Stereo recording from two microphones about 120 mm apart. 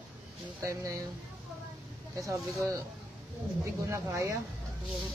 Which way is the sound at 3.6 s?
25° right (ahead or behind).